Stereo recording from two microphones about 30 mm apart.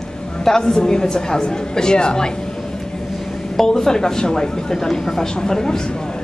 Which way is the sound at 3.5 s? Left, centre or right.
Centre.